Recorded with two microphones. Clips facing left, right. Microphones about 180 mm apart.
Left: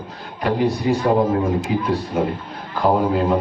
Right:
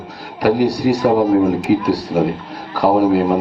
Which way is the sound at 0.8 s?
85° right.